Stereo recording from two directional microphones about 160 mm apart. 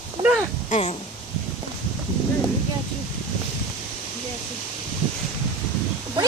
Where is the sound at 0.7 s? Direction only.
45° left (ahead or behind).